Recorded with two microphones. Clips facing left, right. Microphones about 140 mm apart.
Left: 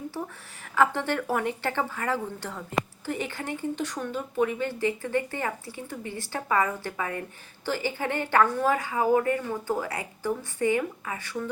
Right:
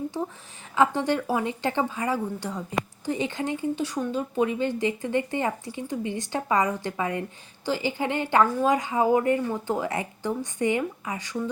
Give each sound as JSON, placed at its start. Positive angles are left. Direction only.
{"t": 0.1, "sound": "speech", "side_deg": -20}